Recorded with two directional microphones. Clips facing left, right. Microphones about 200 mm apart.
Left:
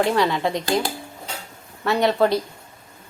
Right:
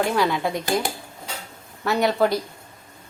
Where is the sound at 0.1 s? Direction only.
Centre (ahead or behind).